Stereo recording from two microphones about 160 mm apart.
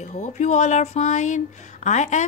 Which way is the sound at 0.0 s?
45° left (ahead or behind).